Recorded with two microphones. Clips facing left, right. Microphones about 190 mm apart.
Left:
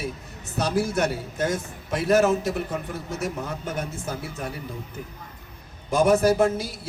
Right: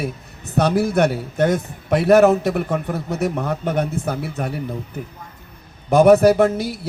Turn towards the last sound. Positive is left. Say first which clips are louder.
# right 5 dB
turn(degrees=-60)  # may be behind; listen again after turning